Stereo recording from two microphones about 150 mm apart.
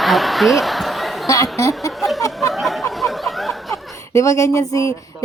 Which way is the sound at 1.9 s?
Centre (ahead or behind).